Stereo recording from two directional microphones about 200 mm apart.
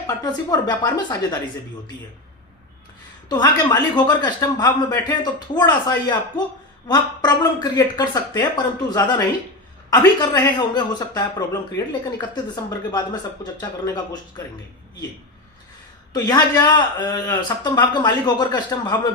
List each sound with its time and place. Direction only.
0.2 s a man's voice: 20° left (ahead or behind)
3.2 s a man's voice: 20° left (ahead or behind)
13.4 s a man's voice: 20° left (ahead or behind)
16.1 s a man's voice: 20° left (ahead or behind)